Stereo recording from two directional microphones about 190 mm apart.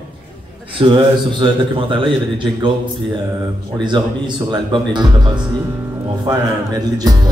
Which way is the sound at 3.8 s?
25° right (ahead or behind).